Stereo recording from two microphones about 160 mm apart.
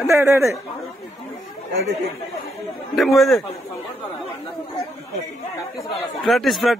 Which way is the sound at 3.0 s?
Centre (ahead or behind).